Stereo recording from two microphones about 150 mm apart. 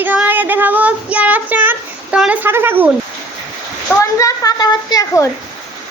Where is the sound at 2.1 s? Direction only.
10° right (ahead or behind).